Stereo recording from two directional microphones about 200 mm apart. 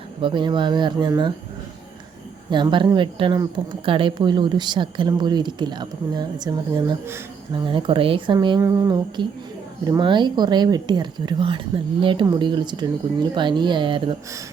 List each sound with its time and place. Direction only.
0.2 s a woman's voice: 25° right (ahead or behind)
2.5 s a woman's voice: 25° right (ahead or behind)